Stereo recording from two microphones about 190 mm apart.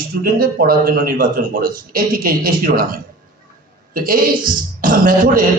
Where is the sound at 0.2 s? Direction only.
50° right (ahead or behind).